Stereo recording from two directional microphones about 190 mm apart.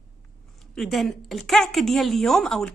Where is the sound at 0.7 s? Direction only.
Centre (ahead or behind).